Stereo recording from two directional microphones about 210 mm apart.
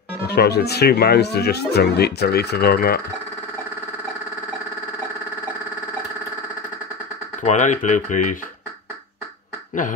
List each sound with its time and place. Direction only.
0.3 s speech: 50° left (ahead or behind)
7.4 s speech: 35° left (ahead or behind)